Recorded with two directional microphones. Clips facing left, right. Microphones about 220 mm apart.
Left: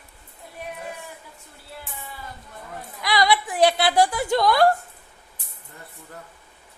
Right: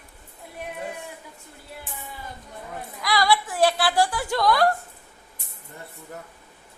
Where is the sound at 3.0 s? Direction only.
20° left (ahead or behind).